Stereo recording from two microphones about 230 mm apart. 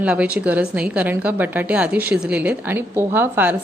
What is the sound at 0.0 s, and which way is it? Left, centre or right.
A woman's voice, centre.